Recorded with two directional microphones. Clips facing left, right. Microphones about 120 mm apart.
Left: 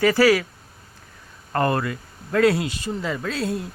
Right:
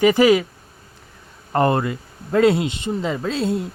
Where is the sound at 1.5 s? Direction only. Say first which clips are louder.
Right 4 dB; 20° right (ahead or behind).